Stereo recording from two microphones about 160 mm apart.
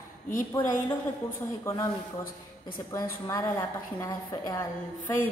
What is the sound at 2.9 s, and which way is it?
A woman's voice, 20° left (ahead or behind).